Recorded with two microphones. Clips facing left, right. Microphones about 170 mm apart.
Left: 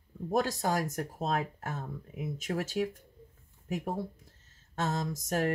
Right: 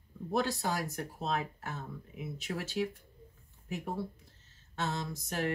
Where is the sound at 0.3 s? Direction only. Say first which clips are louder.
Left 3 dB; 45° left (ahead or behind).